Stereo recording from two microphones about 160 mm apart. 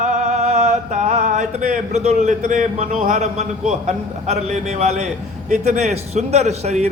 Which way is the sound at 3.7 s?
45° right (ahead or behind).